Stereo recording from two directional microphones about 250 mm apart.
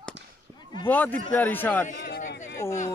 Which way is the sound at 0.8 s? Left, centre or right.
Centre.